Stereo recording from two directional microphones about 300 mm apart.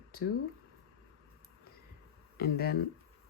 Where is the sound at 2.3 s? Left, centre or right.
Left.